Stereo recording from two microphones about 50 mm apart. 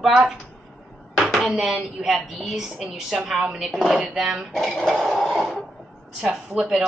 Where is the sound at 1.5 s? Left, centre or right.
Centre.